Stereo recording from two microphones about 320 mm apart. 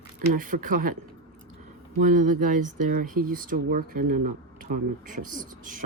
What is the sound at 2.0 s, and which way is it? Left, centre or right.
Speech, right.